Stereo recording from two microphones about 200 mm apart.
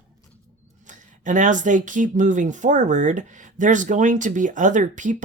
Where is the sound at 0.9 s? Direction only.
40° right (ahead or behind).